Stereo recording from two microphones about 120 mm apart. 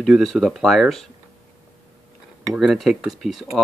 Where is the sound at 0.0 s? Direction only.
Centre (ahead or behind).